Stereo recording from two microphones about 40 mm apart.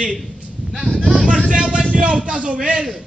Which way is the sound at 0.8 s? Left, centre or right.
Centre.